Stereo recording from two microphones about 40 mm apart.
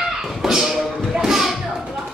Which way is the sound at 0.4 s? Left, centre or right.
Centre.